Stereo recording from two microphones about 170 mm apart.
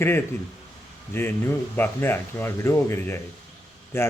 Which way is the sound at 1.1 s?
15° left (ahead or behind).